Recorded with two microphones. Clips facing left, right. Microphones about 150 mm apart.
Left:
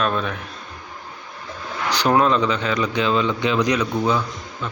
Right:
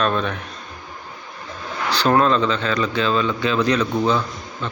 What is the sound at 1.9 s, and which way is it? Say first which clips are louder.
Speech: right 1 dB; 15° left (ahead or behind).